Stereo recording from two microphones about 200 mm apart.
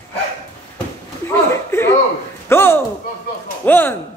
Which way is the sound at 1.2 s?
10° left (ahead or behind).